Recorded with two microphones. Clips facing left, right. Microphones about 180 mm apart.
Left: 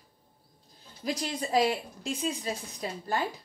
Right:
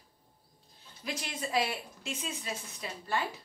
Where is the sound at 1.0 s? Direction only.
35° left (ahead or behind).